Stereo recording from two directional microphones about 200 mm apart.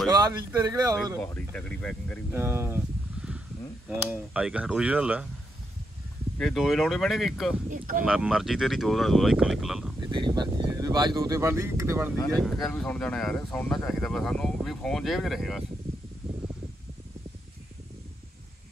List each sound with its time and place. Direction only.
0.1 s a sound: 20° right (ahead or behind)
0.6 s speech: 15° right (ahead or behind)
1.2 s speech: 5° left (ahead or behind)
2.3 s a sound: 10° right (ahead or behind)
4.1 s speech: 5° right (ahead or behind)
6.3 s speech: centre (ahead or behind)
7.7 s speech: 40° right (ahead or behind)
8.0 s speech: 5° right (ahead or behind)
9.9 s speech: 20° right (ahead or behind)
12.4 s speech: centre (ahead or behind)